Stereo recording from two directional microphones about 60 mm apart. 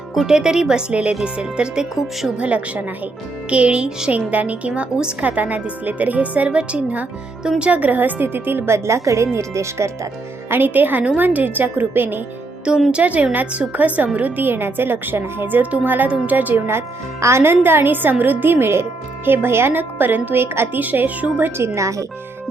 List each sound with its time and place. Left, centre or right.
0.1 s a woman's voice: centre; by 10.1 s right
10.5 s a woman's voice: right
12.9 s a woman's voice: right
16.6 s a woman's voice: right
21.6 s a woman's voice: right